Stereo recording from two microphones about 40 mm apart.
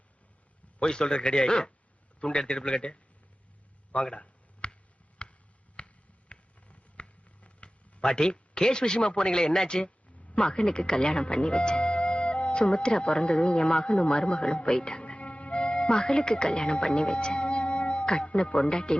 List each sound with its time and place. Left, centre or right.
0.8 s speech: left
3.9 s a sound: left
5.7 s finger snapping: left
8.0 s speech: centre